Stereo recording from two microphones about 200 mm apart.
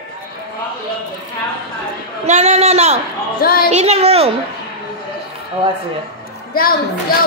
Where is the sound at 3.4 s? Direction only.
50° left (ahead or behind).